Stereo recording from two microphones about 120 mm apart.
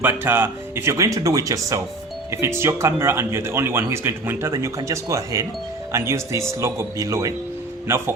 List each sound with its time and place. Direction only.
0.0 s speech: 15° right (ahead or behind)